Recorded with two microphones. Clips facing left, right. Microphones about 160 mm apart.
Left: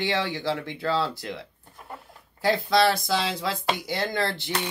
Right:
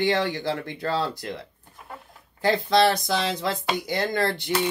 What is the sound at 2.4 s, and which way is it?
Speech, 20° right (ahead or behind).